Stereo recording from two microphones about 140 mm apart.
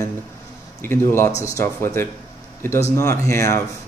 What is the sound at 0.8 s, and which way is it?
Speech, 15° left (ahead or behind).